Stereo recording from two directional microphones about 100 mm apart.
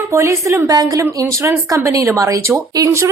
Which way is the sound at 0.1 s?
30° right (ahead or behind).